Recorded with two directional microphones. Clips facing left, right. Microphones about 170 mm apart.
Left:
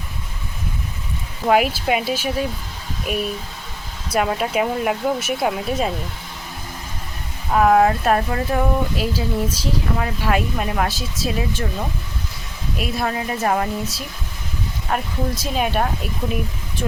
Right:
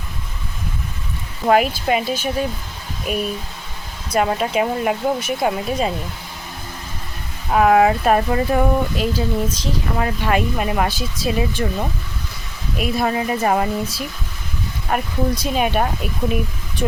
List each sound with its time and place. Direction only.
1.5 s speech: 5° left (ahead or behind)
7.5 s speech: 5° right (ahead or behind)
12.7 s speech: centre (ahead or behind)